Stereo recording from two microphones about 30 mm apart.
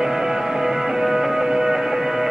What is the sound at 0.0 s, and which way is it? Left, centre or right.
Music, centre.